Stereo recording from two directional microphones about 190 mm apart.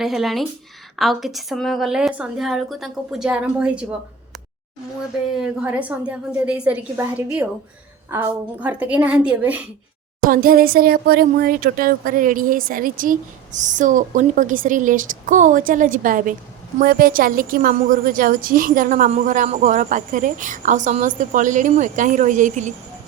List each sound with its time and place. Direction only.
0.0 s a woman's voice: centre (ahead or behind)
5.4 s a woman's voice: 5° right (ahead or behind)
8.5 s a woman's voice: 5° right (ahead or behind)
10.2 s speech: 45° right (ahead or behind)